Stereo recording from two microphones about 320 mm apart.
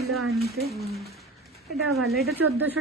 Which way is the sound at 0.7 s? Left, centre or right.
Centre.